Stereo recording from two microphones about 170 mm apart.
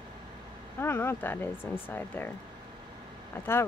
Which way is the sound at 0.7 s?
15° left (ahead or behind).